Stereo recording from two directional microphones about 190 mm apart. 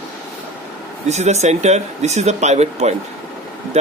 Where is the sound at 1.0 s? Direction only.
35° right (ahead or behind).